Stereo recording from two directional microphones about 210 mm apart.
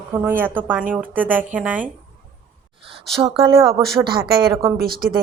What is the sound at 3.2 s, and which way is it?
Speech, 25° right (ahead or behind).